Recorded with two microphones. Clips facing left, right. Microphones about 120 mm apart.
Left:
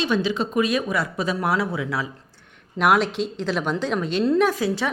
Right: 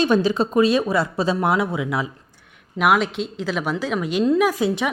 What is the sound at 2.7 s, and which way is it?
A woman's voice, centre (ahead or behind).